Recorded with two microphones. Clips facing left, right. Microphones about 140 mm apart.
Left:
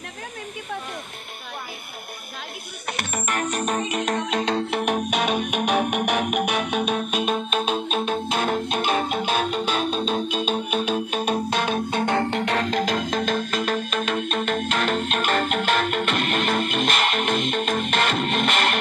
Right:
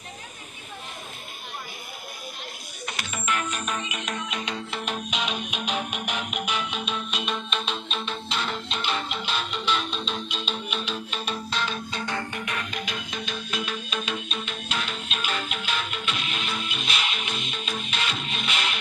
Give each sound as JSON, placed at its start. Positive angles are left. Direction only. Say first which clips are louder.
{"t": 3.0, "sound": "music", "louder": "left 3 dB", "side_deg": 50}
{"t": 4.6, "sound": "music", "louder": "left 9 dB", "side_deg": 60}
{"t": 13.3, "sound": "music", "louder": "left 8 dB", "side_deg": 45}